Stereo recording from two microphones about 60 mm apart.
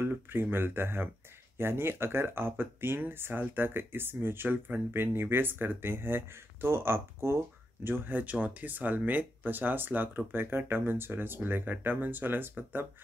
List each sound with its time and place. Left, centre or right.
0.0 s speech: right